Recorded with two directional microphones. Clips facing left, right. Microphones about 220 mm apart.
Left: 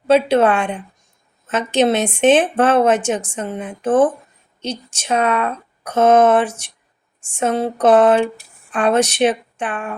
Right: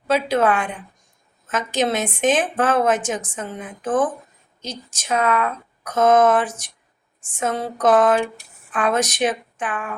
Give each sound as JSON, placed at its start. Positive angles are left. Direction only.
{"t": 0.1, "sound": "a woman's voice", "side_deg": 25}